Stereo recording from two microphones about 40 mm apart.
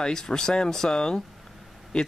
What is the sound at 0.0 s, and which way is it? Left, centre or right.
Speech, centre.